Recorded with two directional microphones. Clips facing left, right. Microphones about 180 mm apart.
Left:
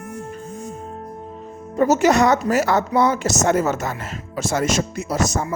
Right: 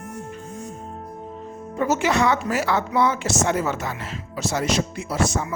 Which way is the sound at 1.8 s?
40° left (ahead or behind).